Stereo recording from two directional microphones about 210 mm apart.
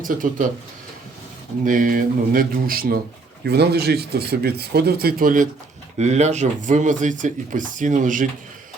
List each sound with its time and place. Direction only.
0.0 s speech: 40° right (ahead or behind)
1.6 s speech: 40° right (ahead or behind)